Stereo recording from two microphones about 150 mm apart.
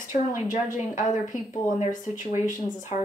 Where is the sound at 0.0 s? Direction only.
60° left (ahead or behind).